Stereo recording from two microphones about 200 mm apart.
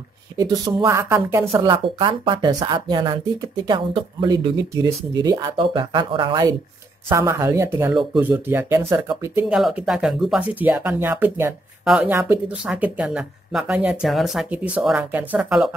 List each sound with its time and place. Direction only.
0.4 s speech: 20° right (ahead or behind)
1.4 s speech: 25° right (ahead or behind); by 15.7 s 5° right (ahead or behind)